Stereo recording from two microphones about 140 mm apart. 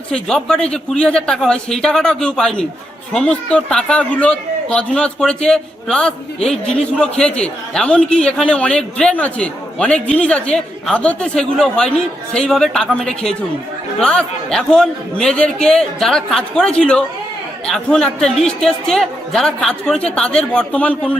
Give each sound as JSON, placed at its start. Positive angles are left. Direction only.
{"t": 0.1, "sound": "a man's voice", "side_deg": 5}